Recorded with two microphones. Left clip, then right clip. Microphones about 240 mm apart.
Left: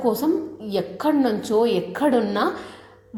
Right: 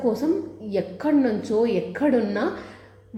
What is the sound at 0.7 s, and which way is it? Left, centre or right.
A woman's voice, left.